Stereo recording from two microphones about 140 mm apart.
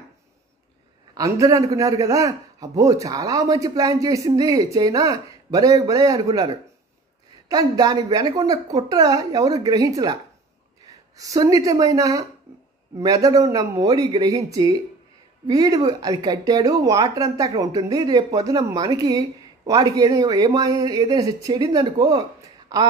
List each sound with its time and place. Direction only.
1.1 s speech: 25° right (ahead or behind)
7.4 s speech: 25° right (ahead or behind)